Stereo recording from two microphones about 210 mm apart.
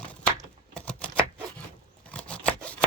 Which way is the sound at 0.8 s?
5° left (ahead or behind).